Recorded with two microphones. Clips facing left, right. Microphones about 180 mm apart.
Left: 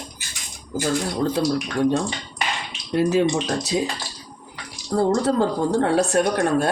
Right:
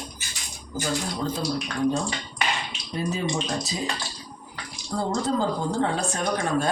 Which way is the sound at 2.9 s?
85° left.